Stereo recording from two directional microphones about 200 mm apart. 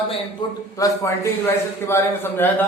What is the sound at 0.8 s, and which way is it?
A man's voice, 15° left (ahead or behind).